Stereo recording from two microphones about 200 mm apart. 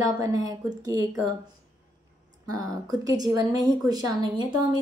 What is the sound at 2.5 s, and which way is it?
A woman's voice, 20° right (ahead or behind).